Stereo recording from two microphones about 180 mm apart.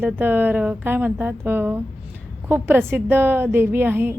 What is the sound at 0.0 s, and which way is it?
A woman's voice, 10° right (ahead or behind).